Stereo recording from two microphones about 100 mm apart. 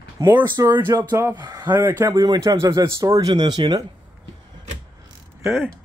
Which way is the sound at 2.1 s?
35° right (ahead or behind).